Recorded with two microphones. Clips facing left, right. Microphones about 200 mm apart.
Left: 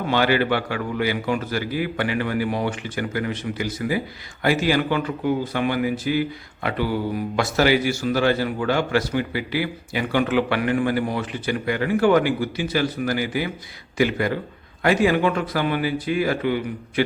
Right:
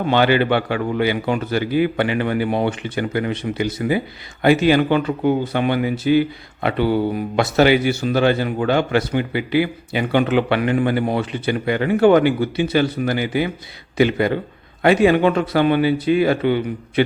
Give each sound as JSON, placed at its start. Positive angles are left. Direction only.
{"t": 0.1, "sound": "a man's voice", "side_deg": -25}